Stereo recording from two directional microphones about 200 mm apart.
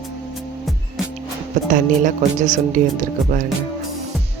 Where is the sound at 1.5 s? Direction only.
40° right (ahead or behind).